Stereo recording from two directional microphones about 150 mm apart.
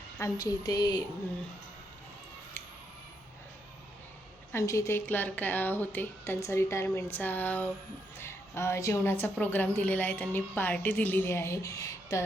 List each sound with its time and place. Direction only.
0.2 s speech: 25° left (ahead or behind)
4.5 s a woman's voice: 20° left (ahead or behind)